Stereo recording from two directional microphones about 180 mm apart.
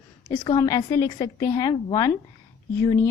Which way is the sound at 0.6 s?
20° left (ahead or behind).